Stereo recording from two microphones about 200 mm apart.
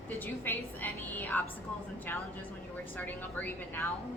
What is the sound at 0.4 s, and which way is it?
Speech, 10° left (ahead or behind).